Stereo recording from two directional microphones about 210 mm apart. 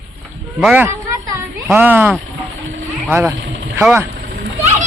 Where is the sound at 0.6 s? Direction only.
5° right (ahead or behind).